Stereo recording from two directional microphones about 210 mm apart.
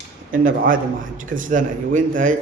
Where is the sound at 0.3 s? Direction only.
40° right (ahead or behind).